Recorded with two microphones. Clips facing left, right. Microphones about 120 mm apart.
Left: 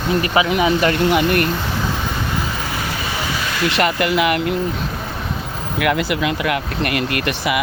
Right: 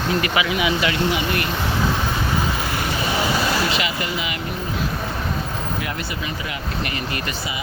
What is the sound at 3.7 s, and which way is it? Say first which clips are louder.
Speech: left 6 dB; 60° left (ahead or behind).